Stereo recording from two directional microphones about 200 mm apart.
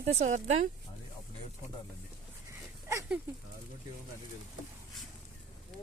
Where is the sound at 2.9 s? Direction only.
15° right (ahead or behind).